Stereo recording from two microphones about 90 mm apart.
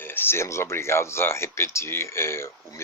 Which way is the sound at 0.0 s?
25° left (ahead or behind).